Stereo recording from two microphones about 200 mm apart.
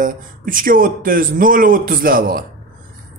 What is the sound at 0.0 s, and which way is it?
Speech, 45° right (ahead or behind).